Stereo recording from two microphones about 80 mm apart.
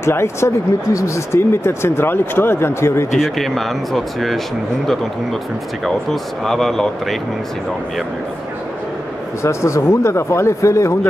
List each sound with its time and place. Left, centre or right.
0.0 s speech: left
3.2 s speech: centre
5.9 s speech: centre
9.4 s speech: left